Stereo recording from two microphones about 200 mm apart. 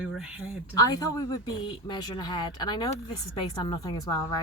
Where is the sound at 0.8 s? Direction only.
15° left (ahead or behind).